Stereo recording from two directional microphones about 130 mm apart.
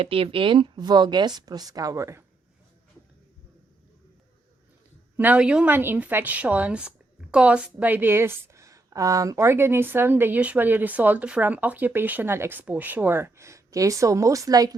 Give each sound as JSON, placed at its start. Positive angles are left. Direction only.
{"t": 0.0, "sound": "a woman's voice", "side_deg": -45}
{"t": 5.1, "sound": "a woman's voice", "side_deg": -15}